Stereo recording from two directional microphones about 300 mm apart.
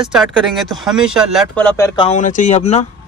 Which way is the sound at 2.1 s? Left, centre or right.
Left.